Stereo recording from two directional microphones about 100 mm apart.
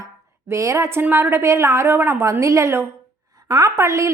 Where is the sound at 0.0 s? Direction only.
30° right (ahead or behind).